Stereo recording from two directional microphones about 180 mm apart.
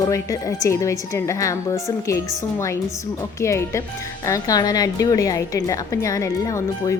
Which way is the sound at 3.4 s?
15° left (ahead or behind).